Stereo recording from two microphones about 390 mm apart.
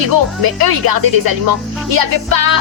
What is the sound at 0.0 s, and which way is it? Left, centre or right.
Speech, right.